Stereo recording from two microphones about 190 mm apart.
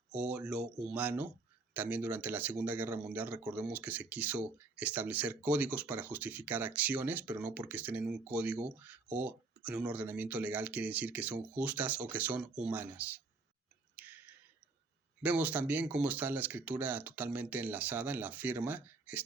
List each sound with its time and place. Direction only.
0.1 s speech: 10° right (ahead or behind)
13.9 s clicking: 10° right (ahead or behind)
15.2 s speech: 10° right (ahead or behind)